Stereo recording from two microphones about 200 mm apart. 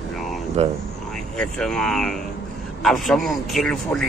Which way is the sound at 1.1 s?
5° left (ahead or behind).